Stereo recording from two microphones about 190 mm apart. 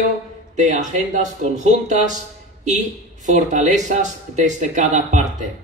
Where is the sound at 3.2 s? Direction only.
40° right (ahead or behind).